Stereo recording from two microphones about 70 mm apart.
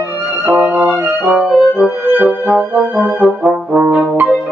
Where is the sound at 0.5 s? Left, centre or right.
Right.